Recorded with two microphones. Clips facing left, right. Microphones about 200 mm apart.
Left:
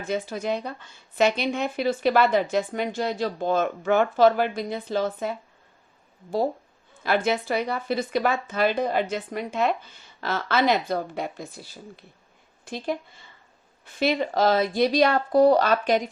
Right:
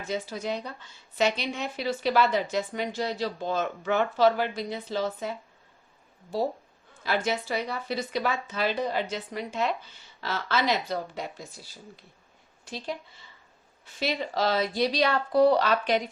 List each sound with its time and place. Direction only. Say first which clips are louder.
0.1 s a woman's voice: left 4 dB; 55° left (ahead or behind)
7.0 s a woman's voice: left 4 dB; 55° left (ahead or behind)
12.6 s a woman's voice: left 6 dB; 50° left (ahead or behind)